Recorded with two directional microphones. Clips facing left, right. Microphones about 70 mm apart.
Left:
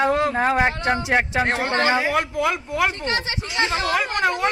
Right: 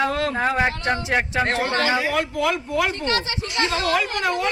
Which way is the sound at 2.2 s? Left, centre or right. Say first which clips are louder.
Even; centre.